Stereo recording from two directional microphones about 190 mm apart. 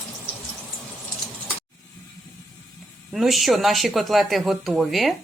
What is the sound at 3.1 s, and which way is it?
A woman's voice, centre (ahead or behind).